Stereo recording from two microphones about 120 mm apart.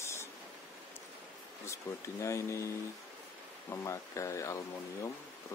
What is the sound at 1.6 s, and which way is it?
Speech, 25° left (ahead or behind).